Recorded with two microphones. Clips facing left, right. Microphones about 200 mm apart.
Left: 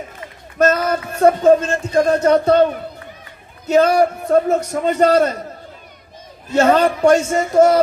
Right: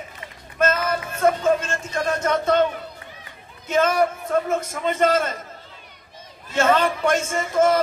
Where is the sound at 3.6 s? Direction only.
40° left (ahead or behind).